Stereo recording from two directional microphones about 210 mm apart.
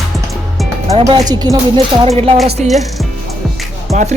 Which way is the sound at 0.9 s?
15° right (ahead or behind).